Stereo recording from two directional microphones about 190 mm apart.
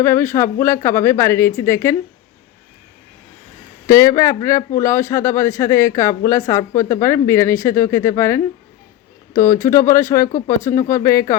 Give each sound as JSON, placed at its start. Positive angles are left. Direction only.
{"t": 0.0, "sound": "speech", "side_deg": 15}
{"t": 3.8, "sound": "speech", "side_deg": 15}